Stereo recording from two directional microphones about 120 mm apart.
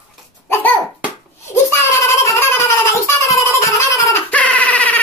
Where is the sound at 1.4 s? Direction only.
25° left (ahead or behind).